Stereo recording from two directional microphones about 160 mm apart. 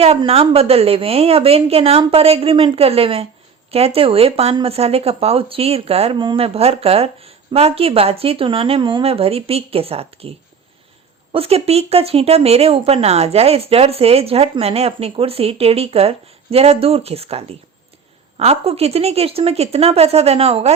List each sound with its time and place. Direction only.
0.0 s speech: 40° right (ahead or behind)